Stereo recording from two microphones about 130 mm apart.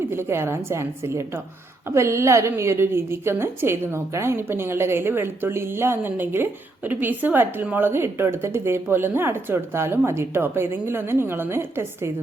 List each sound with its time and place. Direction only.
0.1 s a woman's voice: 20° right (ahead or behind)